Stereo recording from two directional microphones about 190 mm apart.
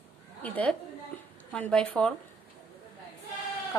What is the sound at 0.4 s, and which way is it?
Speech, 5° left (ahead or behind).